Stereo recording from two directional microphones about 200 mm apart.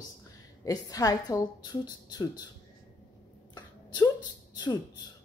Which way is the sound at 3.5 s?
20° left (ahead or behind).